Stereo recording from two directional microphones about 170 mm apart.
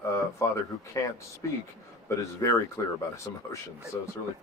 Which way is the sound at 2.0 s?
20° left (ahead or behind).